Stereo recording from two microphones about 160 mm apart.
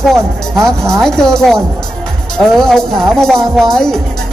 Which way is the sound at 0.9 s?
5° left (ahead or behind).